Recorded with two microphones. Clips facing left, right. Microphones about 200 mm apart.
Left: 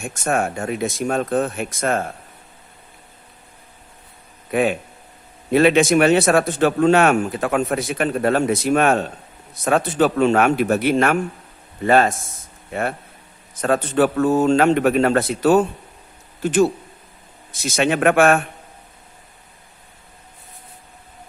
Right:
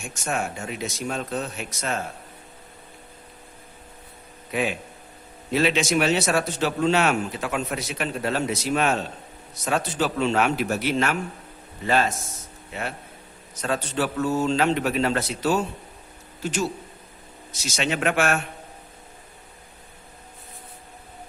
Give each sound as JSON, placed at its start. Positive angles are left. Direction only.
{"t": 0.0, "sound": "speech", "side_deg": 55}
{"t": 4.5, "sound": "speech", "side_deg": 55}